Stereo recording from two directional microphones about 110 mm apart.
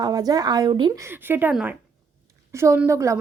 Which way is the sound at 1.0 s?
20° right (ahead or behind).